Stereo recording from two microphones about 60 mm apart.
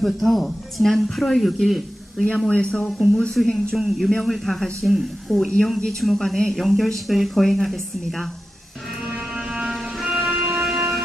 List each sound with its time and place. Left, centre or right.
0.0 s speech: centre
2.2 s speech: centre
3.4 s speech: centre
5.8 s speech: centre
9.1 s a sound: centre
10.0 s music: centre